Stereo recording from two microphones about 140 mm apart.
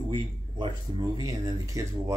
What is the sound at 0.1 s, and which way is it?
Speech, 35° right (ahead or behind).